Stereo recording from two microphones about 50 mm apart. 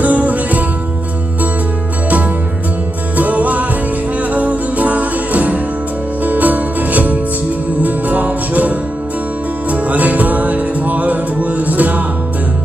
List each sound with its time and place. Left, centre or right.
0.0 s music: right
3.2 s music: right